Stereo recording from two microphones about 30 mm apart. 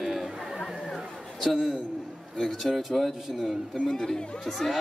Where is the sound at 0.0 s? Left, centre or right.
Centre.